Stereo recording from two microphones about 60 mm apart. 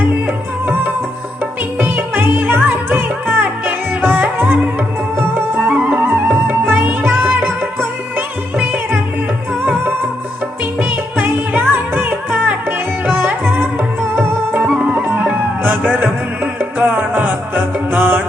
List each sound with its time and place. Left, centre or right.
1.8 s music: right
5.6 s music: right
6.0 s music: right
10.8 s music: right
14.9 s music: right